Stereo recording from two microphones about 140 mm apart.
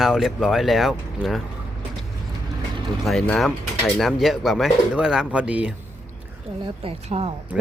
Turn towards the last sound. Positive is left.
turn(degrees=-45)  # may be behind; listen again after turning